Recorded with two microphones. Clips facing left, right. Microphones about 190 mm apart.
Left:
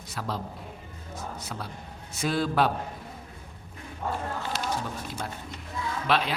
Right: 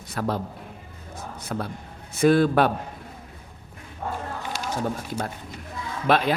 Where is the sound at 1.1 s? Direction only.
55° right (ahead or behind).